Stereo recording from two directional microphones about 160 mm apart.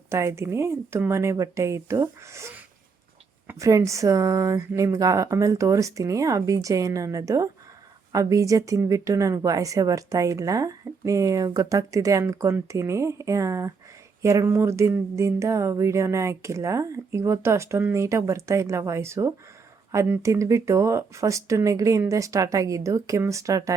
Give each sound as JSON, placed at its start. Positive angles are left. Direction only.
{"t": 0.1, "sound": "speech", "side_deg": -15}